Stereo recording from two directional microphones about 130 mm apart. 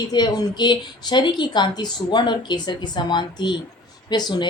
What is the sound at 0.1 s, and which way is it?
A woman's voice, 30° left (ahead or behind).